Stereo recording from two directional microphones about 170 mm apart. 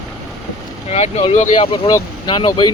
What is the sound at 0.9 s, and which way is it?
Speech, 40° left (ahead or behind).